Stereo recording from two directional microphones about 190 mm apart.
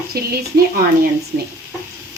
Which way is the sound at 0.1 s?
55° right (ahead or behind).